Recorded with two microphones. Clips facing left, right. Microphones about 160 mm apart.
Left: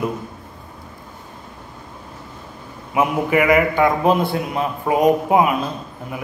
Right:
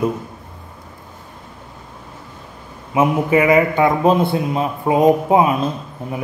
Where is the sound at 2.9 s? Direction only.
25° right (ahead or behind).